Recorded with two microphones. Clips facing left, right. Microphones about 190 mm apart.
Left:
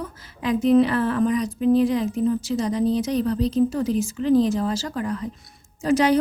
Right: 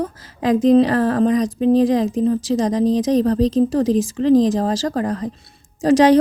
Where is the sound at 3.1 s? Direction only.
40° right (ahead or behind).